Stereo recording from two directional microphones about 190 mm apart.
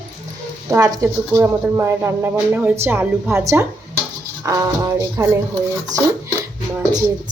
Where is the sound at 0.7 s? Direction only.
15° right (ahead or behind).